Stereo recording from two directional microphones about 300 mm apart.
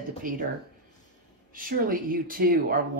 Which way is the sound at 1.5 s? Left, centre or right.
Right.